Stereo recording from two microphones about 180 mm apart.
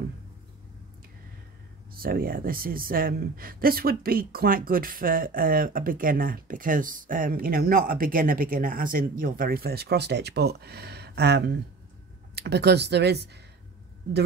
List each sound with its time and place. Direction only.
2.0 s speech: 55° right (ahead or behind)